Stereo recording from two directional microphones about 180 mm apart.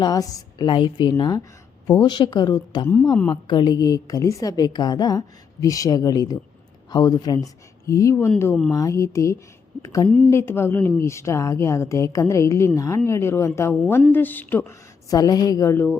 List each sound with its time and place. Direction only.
0.0 s a woman's voice: 20° left (ahead or behind)
15.1 s a woman's voice: 20° left (ahead or behind)